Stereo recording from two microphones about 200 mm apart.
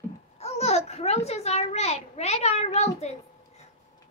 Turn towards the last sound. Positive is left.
turn(degrees=35)  # may be behind; listen again after turning